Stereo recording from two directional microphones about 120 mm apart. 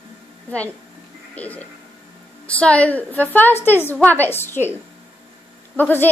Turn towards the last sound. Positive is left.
turn(degrees=15)  # may be behind; listen again after turning